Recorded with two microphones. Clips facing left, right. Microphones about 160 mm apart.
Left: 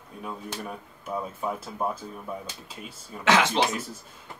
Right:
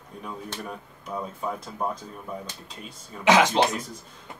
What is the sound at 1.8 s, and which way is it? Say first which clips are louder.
Speech: even; 5° left (ahead or behind).